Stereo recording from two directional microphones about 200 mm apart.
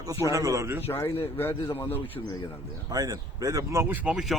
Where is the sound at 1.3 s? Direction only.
10° left (ahead or behind).